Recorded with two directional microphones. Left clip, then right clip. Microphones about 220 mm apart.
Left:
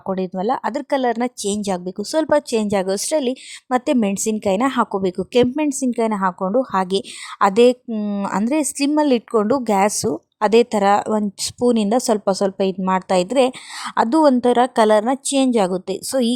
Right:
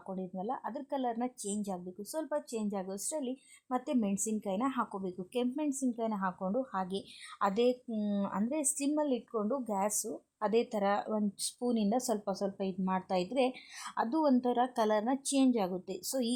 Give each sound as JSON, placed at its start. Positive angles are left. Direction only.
{"t": 0.0, "sound": "speech", "side_deg": 45}